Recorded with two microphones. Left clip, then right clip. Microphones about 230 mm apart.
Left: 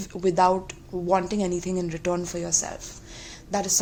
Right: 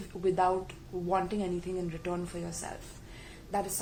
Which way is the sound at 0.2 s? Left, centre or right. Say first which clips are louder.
Left 7 dB; left.